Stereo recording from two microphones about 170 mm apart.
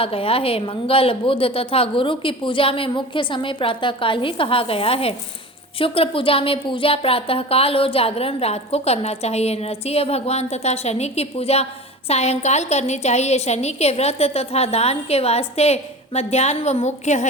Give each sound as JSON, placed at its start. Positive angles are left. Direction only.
{"t": 0.0, "sound": "speech", "side_deg": 35}